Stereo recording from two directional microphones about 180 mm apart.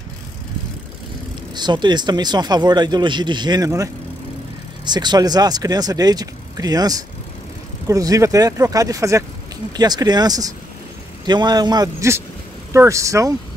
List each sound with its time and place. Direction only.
1.5 s speech: 25° right (ahead or behind)